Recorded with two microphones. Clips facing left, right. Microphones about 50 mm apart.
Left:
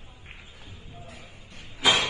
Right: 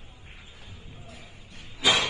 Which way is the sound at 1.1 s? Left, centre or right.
Left.